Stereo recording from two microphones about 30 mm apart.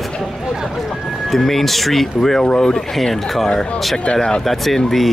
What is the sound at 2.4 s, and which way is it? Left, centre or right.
Speech, left.